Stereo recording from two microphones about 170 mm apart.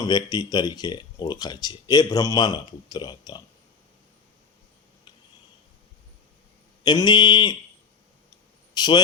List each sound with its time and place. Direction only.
0.0 s speech: 25° left (ahead or behind)
6.8 s speech: 25° left (ahead or behind)
8.7 s a man's voice: 25° left (ahead or behind)